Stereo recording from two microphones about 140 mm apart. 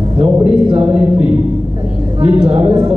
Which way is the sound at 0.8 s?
5° right (ahead or behind).